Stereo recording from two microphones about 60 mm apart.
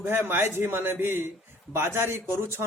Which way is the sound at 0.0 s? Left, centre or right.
Right.